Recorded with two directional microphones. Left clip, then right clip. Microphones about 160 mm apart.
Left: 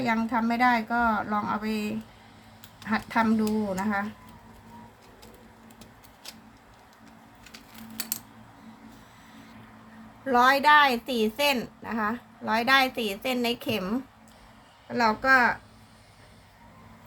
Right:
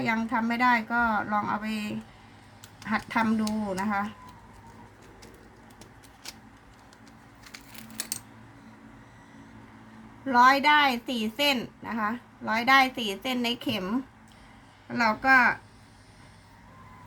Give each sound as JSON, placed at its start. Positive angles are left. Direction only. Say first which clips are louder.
{"t": 0.0, "sound": "a woman's voice", "louder": "left 1 dB", "side_deg": 0}
{"t": 6.3, "sound": "a sound", "louder": "right 1 dB", "side_deg": -5}
{"t": 10.2, "sound": "a woman's voice", "louder": "even", "side_deg": 20}